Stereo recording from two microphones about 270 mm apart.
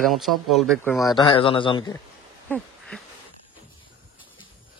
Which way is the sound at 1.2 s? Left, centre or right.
Centre.